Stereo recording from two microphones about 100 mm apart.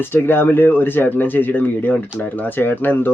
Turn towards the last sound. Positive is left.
turn(degrees=20)  # may be behind; listen again after turning